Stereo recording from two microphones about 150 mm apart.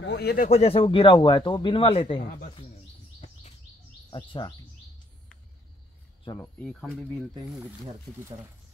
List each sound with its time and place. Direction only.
0.2 s speech: 90° left
0.5 s speech: 40° left (ahead or behind)
4.1 s speech: 30° left (ahead or behind)
6.4 s speech: 5° left (ahead or behind)